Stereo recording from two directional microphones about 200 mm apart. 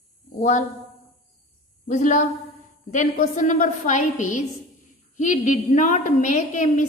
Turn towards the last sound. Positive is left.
turn(degrees=40)  # may be behind; listen again after turning